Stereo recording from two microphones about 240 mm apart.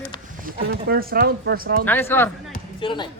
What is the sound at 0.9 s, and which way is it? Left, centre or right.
Speech, right.